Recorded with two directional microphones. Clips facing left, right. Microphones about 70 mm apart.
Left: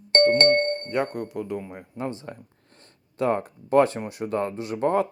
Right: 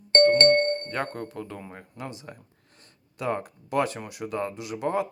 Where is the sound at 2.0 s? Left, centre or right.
Left.